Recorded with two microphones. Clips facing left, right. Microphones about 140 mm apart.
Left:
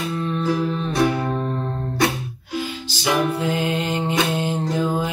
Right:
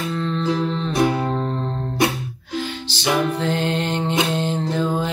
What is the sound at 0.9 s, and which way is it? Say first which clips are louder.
Music: right 1 dB; 25° right (ahead or behind).